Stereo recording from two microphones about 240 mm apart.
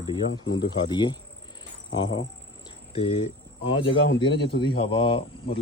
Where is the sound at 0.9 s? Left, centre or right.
Centre.